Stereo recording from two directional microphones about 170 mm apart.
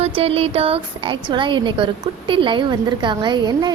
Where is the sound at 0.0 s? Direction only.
35° right (ahead or behind).